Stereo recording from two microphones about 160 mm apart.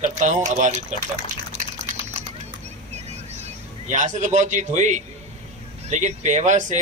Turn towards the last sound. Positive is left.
turn(degrees=-45)  # may be behind; listen again after turning